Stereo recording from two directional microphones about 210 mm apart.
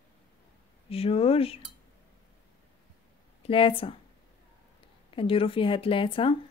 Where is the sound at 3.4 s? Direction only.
25° left (ahead or behind).